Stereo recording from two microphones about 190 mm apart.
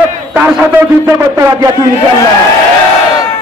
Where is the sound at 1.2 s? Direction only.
15° right (ahead or behind).